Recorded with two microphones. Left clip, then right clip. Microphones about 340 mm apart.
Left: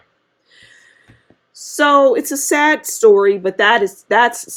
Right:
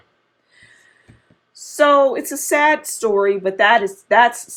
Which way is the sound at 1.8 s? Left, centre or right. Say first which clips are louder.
Left 2 dB; left.